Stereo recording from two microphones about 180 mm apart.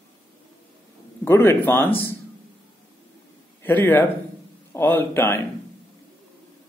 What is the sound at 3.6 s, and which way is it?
A man's voice, 10° left (ahead or behind).